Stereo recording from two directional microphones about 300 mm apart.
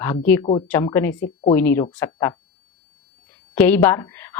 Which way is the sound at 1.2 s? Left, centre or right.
Left.